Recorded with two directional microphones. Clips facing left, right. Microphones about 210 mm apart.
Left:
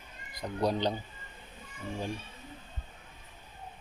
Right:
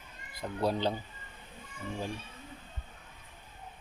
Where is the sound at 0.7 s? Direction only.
5° right (ahead or behind).